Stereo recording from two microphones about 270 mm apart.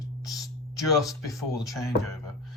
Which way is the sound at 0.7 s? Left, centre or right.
Centre.